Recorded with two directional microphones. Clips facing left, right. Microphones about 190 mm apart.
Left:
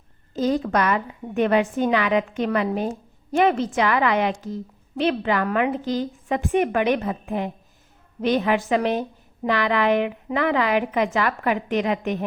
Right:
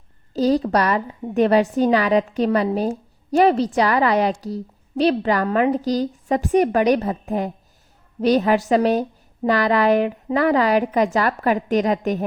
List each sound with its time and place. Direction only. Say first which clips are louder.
0.3 s a woman's voice: right 3 dB; 35° right (ahead or behind)